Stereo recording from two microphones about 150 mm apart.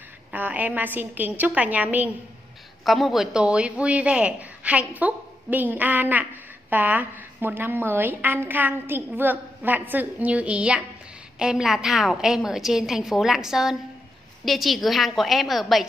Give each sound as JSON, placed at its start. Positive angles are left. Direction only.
{"t": 0.3, "sound": "a woman's voice", "side_deg": -10}
{"t": 2.8, "sound": "a woman's voice", "side_deg": 0}